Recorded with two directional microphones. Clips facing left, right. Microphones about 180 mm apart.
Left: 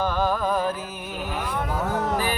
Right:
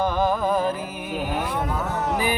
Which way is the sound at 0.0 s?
15° right (ahead or behind).